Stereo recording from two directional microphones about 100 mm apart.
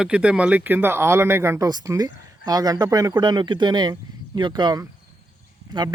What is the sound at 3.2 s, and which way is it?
Speech, 50° right (ahead or behind).